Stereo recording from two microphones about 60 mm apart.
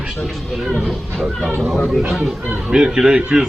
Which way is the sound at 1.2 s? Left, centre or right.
Centre.